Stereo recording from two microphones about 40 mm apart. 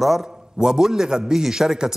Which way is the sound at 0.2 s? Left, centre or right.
Centre.